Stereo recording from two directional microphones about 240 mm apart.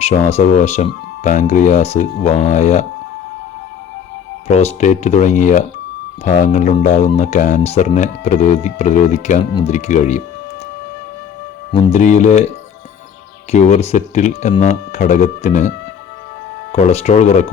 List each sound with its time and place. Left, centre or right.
0.0 s speech: left
4.4 s speech: left
11.7 s speech: left
13.5 s speech: left
16.7 s speech: left